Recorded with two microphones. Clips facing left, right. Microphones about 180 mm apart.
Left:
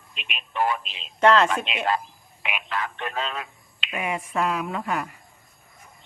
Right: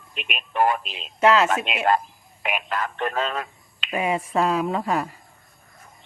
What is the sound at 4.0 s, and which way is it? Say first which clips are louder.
A woman's voice: right 4 dB; 30° right (ahead or behind).